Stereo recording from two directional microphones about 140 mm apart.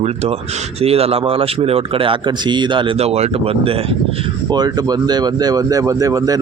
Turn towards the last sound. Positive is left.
turn(degrees=-25)  # may be behind; listen again after turning